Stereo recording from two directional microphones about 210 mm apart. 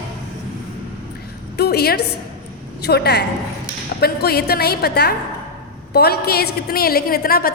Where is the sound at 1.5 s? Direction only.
50° left (ahead or behind).